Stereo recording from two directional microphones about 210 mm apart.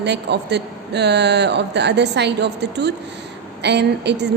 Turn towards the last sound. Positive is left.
turn(degrees=-55)  # may be behind; listen again after turning